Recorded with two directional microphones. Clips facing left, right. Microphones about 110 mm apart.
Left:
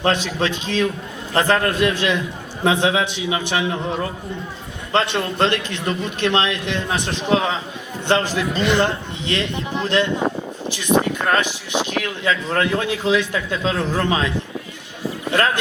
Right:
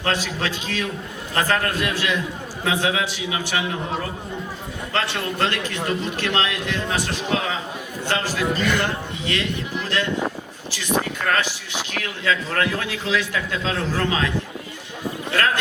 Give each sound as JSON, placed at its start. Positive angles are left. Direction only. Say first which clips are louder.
{"t": 0.0, "sound": "a man's voice", "louder": "left 4 dB", "side_deg": 20}
{"t": 4.9, "sound": "a man's voice", "louder": "left 5 dB", "side_deg": 20}
{"t": 11.3, "sound": "a man's voice", "louder": "left 3 dB", "side_deg": 20}
{"t": 15.3, "sound": "a man's voice", "louder": "left 3 dB", "side_deg": 20}